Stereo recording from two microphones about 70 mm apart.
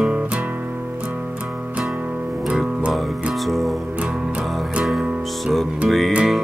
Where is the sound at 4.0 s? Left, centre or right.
Centre.